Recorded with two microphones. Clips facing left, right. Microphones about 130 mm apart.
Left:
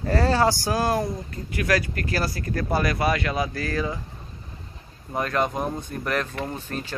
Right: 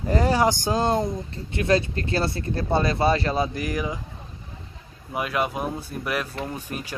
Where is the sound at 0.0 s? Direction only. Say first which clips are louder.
Even; 15° right (ahead or behind).